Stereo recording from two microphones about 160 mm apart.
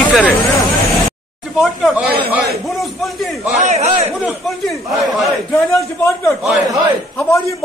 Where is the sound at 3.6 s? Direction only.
45° right (ahead or behind).